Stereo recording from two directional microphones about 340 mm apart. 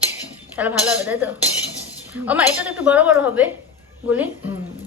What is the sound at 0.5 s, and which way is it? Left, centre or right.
A woman's voice, centre.